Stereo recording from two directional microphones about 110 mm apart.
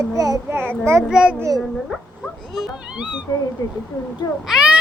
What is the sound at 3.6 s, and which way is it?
Speech, 35° left (ahead or behind).